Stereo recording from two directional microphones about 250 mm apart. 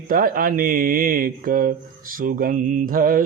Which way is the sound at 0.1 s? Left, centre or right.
Right.